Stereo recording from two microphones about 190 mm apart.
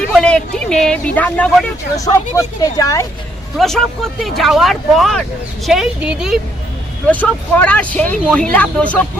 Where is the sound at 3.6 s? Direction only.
Centre (ahead or behind).